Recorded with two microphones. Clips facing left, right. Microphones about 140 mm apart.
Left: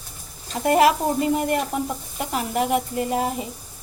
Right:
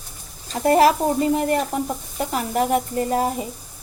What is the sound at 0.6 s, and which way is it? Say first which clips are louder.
Speech: right 2 dB; 35° right (ahead or behind).